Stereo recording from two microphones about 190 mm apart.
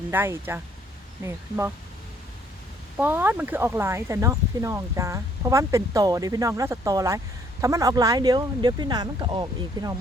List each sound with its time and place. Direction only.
0.1 s speech: 10° right (ahead or behind)
3.0 s speech: 10° right (ahead or behind)